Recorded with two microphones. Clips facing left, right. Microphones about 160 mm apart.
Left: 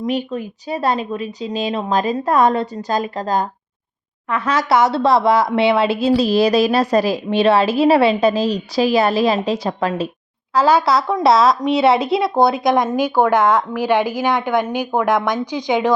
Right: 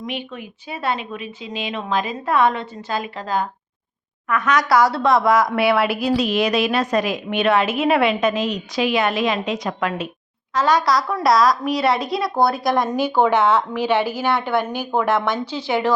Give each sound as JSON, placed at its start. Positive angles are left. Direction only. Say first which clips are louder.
{"t": 0.0, "sound": "speech", "louder": "left 8 dB", "side_deg": 35}
{"t": 4.3, "sound": "a woman's voice", "louder": "left 1 dB", "side_deg": 30}